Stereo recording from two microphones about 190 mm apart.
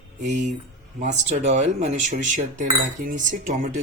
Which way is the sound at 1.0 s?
40° right (ahead or behind).